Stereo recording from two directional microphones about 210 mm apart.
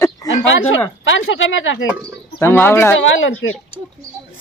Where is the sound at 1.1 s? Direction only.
65° left (ahead or behind).